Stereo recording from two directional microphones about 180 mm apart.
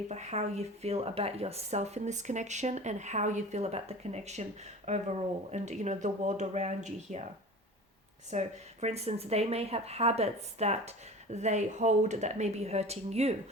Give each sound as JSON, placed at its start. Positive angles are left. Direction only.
{"t": 0.1, "sound": "speech", "side_deg": -40}
{"t": 8.3, "sound": "speech", "side_deg": -40}